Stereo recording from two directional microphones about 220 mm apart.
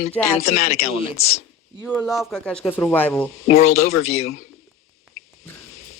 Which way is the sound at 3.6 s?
70° left (ahead or behind).